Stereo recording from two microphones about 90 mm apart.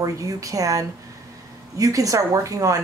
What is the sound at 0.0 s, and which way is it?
Speech, 40° right (ahead or behind).